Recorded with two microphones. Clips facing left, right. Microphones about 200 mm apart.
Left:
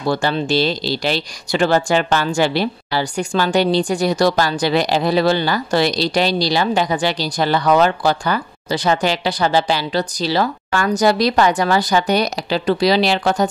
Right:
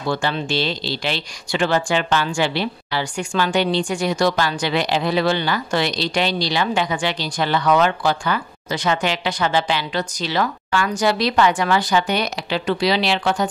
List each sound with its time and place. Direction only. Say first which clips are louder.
0.1 s speech: left 4 dB; 40° left (ahead or behind)